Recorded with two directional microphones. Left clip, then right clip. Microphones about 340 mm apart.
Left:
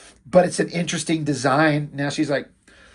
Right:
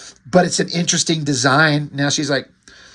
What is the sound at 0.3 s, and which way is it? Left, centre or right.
Speech, centre.